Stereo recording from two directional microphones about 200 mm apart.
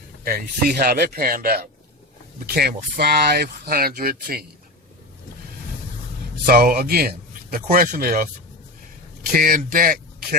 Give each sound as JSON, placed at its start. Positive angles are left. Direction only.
{"t": 0.3, "sound": "speech", "side_deg": -50}
{"t": 6.4, "sound": "speech", "side_deg": -45}
{"t": 9.3, "sound": "speech", "side_deg": -45}